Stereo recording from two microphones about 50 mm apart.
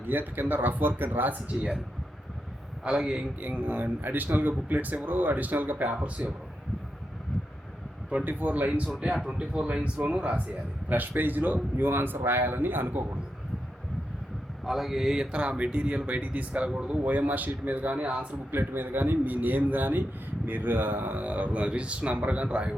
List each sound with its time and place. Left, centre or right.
0.1 s a man's voice: right
3.0 s a man's voice: centre
3.4 s a man's voice: right
8.2 s a man's voice: right
9.2 s speech: centre
10.8 s speech: right
14.6 s speech: centre
15.2 s a man's voice: right
18.5 s a man's voice: right